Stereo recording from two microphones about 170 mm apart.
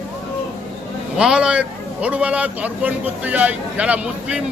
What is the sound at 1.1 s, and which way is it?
A man's voice, 5° right (ahead or behind).